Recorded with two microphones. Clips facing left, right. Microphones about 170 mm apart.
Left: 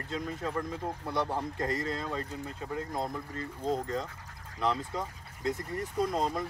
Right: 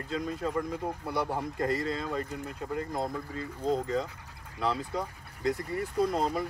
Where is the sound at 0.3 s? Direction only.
10° right (ahead or behind).